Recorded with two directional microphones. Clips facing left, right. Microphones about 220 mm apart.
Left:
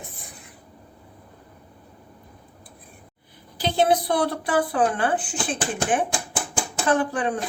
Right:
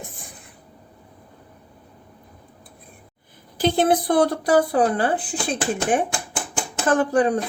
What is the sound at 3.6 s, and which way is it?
Speech, 50° right (ahead or behind).